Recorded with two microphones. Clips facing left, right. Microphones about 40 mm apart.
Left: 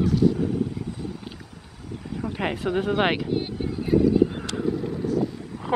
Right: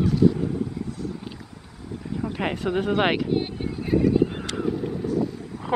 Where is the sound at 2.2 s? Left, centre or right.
Centre.